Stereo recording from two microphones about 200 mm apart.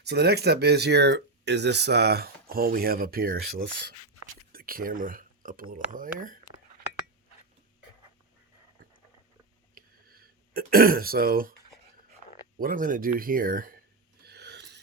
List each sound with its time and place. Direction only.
0.0 s speech: 55° right (ahead or behind)
4.5 s speech: 45° right (ahead or behind)
9.7 s throat clearing: 45° right (ahead or behind)
12.5 s speech: 45° right (ahead or behind)
14.3 s a sound: 55° right (ahead or behind)